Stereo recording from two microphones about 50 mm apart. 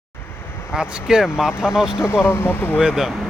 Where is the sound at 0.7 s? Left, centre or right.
Centre.